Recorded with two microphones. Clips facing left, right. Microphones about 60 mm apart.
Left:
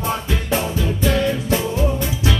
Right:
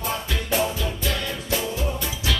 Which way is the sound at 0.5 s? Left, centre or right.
Left.